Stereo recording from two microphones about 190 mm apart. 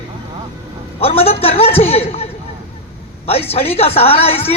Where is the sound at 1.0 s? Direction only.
30° left (ahead or behind).